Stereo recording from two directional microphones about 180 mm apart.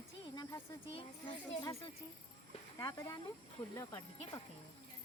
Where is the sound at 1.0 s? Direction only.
30° left (ahead or behind).